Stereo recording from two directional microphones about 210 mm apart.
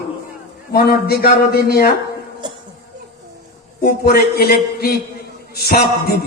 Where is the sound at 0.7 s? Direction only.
45° left (ahead or behind).